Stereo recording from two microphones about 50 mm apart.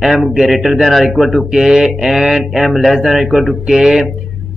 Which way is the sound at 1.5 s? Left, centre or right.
Centre.